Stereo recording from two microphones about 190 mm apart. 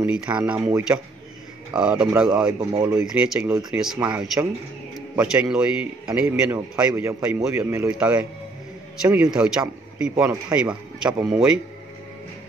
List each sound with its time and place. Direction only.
0.0 s a man's voice: 5° right (ahead or behind)
4.9 s a man's voice: 5° right (ahead or behind)